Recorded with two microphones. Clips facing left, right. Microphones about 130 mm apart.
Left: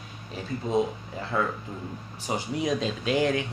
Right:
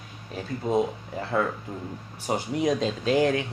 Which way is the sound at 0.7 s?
55° right (ahead or behind).